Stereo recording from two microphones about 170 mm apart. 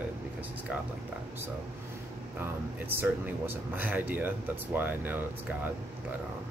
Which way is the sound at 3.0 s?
10° right (ahead or behind).